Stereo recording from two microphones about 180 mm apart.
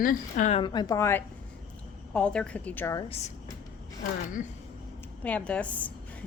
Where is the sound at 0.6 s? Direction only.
25° left (ahead or behind).